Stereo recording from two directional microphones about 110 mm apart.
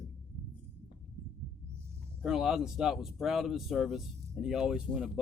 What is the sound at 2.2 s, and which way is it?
Speech, 5° right (ahead or behind).